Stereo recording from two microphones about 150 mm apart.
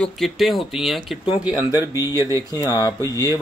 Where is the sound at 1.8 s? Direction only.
20° right (ahead or behind).